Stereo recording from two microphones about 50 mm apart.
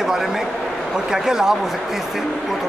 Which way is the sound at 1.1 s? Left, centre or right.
Centre.